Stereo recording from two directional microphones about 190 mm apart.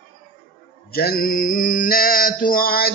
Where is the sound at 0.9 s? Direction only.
50° left (ahead or behind).